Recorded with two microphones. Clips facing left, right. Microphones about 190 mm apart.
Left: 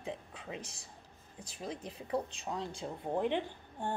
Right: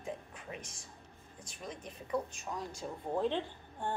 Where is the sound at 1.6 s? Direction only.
30° left (ahead or behind).